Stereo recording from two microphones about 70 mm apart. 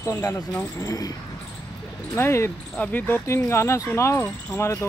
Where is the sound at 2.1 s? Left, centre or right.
Left.